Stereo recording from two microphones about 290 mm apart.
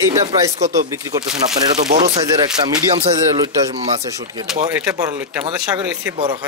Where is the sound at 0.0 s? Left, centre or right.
Centre.